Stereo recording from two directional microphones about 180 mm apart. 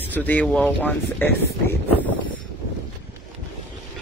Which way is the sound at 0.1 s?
10° left (ahead or behind).